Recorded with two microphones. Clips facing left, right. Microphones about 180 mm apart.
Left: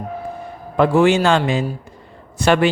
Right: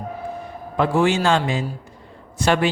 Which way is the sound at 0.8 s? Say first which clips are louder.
Left 5 dB; 65° left (ahead or behind).